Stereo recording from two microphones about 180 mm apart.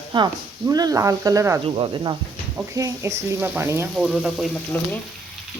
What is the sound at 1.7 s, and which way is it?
Speech, 25° right (ahead or behind).